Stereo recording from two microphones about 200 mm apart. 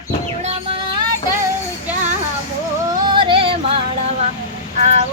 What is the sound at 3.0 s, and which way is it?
Music, 25° right (ahead or behind).